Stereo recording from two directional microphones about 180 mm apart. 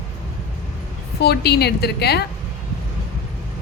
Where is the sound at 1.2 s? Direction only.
65° left (ahead or behind).